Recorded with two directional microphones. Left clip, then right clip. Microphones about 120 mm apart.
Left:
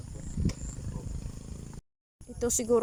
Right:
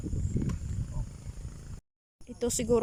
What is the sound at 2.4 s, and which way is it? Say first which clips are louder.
Speech: left 1 dB; 15° right (ahead or behind).